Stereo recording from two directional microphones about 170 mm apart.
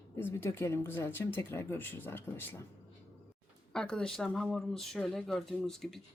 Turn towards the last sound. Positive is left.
turn(degrees=0)  # may be behind; listen again after turning